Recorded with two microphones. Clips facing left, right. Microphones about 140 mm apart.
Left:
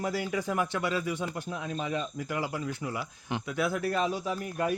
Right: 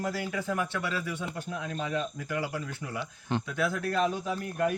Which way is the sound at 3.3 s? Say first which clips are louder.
Even; 15° left (ahead or behind).